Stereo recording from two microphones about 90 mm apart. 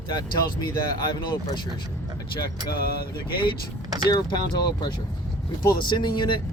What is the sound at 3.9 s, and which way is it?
Vehicle, 45° right (ahead or behind).